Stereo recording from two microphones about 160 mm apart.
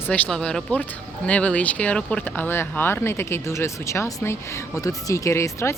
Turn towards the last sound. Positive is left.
turn(degrees=15)  # may be behind; listen again after turning